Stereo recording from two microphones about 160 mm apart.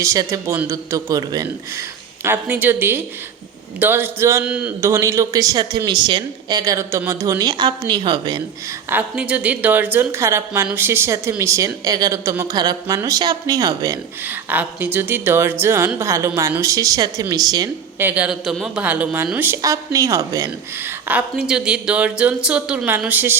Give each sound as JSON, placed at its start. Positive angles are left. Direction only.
{"t": 0.0, "sound": "speech", "side_deg": -20}
{"t": 4.8, "sound": "speech", "side_deg": -20}
{"t": 8.9, "sound": "speech", "side_deg": -10}
{"t": 14.3, "sound": "speech", "side_deg": -10}
{"t": 18.1, "sound": "speech", "side_deg": -5}
{"t": 21.1, "sound": "speech", "side_deg": -5}